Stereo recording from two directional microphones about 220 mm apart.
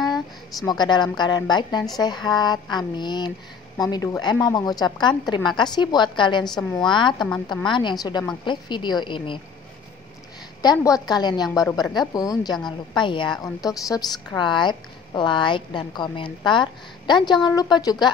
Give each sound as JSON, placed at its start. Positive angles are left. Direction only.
{"t": 0.7, "sound": "a woman's voice", "side_deg": 20}
{"t": 10.6, "sound": "a woman's voice", "side_deg": 15}